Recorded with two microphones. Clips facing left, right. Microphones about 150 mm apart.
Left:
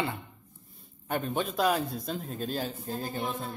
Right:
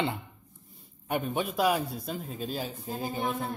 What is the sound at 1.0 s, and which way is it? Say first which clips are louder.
A man's voice: even; 10° right (ahead or behind).